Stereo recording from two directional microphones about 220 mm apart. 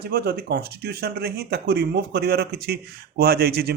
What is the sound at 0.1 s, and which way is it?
Speech, 45° right (ahead or behind).